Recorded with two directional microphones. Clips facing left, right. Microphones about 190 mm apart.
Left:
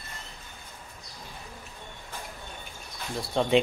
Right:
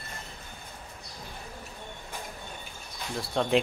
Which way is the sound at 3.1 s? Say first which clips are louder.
Left 2 dB; centre (ahead or behind).